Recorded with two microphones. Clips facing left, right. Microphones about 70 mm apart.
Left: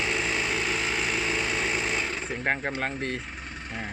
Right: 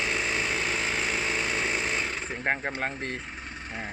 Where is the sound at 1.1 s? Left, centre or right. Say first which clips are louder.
Left 1 dB; centre.